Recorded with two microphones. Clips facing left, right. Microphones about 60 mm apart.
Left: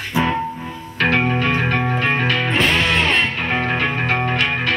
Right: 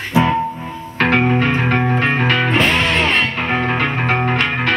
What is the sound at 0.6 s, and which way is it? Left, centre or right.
Music, right.